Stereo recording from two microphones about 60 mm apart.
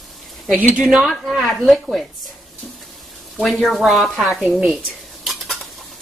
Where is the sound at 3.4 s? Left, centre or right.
Centre.